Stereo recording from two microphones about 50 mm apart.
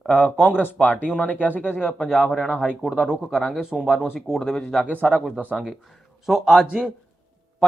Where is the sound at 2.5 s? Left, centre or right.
Right.